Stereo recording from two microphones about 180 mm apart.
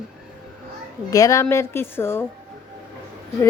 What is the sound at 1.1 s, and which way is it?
A woman's voice, 20° left (ahead or behind).